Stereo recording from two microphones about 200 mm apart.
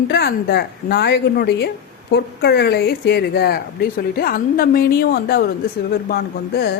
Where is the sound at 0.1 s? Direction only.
50° left (ahead or behind).